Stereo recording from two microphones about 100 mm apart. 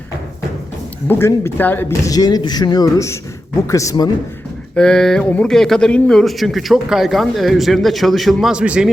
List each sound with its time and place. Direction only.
1.0 s speech: 20° left (ahead or behind)
1.9 s speech: 40° left (ahead or behind)
4.7 s speech: 5° left (ahead or behind); by 8.9 s 10° right (ahead or behind)